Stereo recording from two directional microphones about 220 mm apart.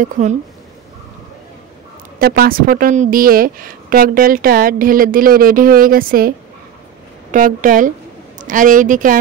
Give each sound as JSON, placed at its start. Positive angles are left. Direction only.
{"t": 0.0, "sound": "a woman's voice", "side_deg": -35}
{"t": 2.1, "sound": "a woman's voice", "side_deg": -45}